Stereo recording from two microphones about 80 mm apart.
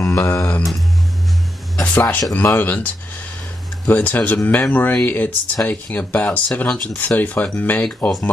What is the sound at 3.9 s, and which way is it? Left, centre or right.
Speech, left.